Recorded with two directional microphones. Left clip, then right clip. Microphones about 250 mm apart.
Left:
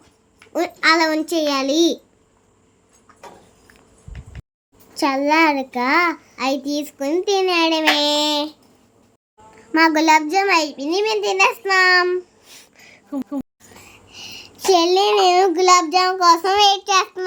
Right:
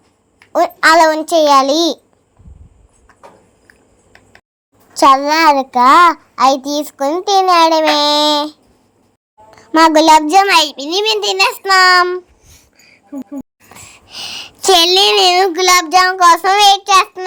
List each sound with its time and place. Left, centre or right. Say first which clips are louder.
0.5 s a child's voice: right 8 dB; right
4.9 s a child's voice: right 7 dB; right
9.6 s a child's voice: right 7 dB; right
12.7 s a sound: even; left
13.7 s speech: right 10 dB; right